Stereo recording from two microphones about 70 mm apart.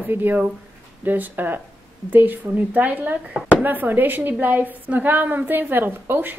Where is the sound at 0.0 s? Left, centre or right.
Right.